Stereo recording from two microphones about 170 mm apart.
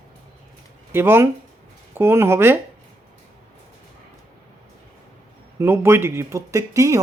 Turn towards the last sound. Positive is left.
turn(degrees=-20)  # may be behind; listen again after turning